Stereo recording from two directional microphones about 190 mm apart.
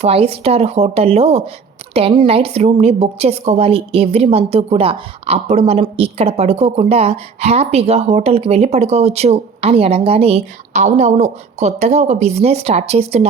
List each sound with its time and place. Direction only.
0.0 s a woman's voice: 30° right (ahead or behind)